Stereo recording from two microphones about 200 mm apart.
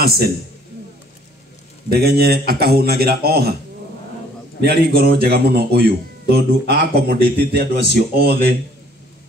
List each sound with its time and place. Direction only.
0.0 s speech: 50° right (ahead or behind)
1.9 s speech: 50° right (ahead or behind)
4.6 s speech: 55° right (ahead or behind)